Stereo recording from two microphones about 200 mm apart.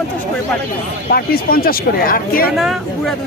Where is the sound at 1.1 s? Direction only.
50° left (ahead or behind).